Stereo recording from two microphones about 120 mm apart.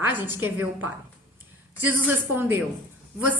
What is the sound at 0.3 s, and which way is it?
A woman's voice, 20° right (ahead or behind).